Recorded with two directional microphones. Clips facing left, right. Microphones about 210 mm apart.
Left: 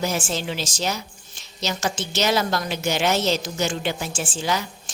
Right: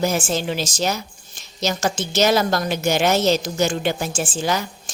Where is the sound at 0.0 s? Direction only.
45° right (ahead or behind).